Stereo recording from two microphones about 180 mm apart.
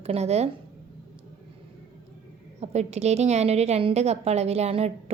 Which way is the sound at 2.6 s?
40° right (ahead or behind).